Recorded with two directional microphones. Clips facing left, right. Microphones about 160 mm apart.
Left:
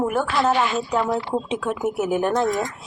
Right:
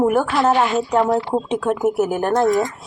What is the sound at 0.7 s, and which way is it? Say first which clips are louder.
Speech: right 5 dB; 45° right (ahead or behind).